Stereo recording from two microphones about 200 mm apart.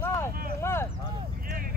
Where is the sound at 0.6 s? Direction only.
15° left (ahead or behind).